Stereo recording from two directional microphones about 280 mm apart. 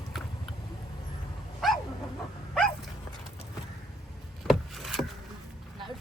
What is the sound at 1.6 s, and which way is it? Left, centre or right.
Dog, centre.